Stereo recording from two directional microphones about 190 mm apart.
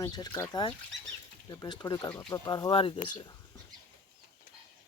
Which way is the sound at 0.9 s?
70° right (ahead or behind).